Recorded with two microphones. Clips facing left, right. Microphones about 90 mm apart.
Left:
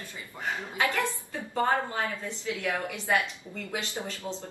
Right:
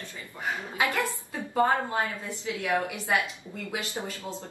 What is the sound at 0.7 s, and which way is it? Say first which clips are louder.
Speech: even; 15° right (ahead or behind).